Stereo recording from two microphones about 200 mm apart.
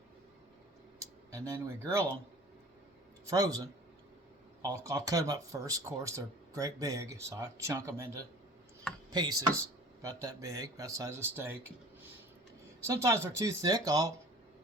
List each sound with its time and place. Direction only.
1.3 s speech: 15° right (ahead or behind)
3.2 s speech: 20° right (ahead or behind)
12.8 s speech: 15° right (ahead or behind)